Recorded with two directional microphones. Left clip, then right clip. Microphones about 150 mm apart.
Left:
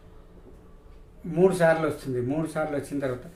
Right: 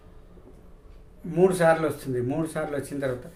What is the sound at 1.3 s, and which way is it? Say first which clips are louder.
Speech: right 1 dB; 25° right (ahead or behind).